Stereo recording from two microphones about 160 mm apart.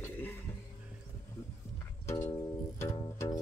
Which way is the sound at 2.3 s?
25° left (ahead or behind).